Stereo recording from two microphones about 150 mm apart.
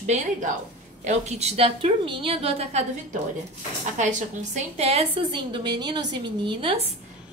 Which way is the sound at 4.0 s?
55° right (ahead or behind).